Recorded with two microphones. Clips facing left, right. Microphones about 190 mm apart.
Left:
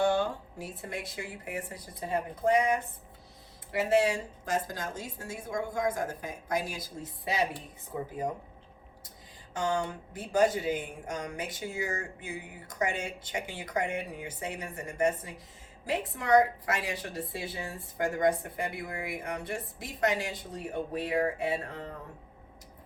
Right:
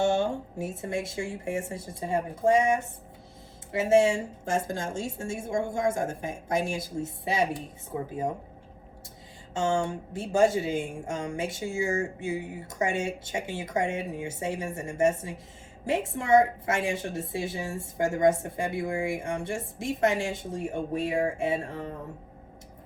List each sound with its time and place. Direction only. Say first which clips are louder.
0.0 s a woman's voice: right 2 dB; 25° right (ahead or behind)
9.6 s a woman's voice: right 4 dB; 25° right (ahead or behind)